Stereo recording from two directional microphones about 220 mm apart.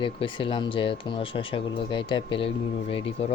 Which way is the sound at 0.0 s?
20° left (ahead or behind).